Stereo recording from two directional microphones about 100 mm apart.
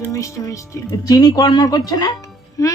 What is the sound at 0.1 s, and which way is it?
A child's voice, 35° left (ahead or behind).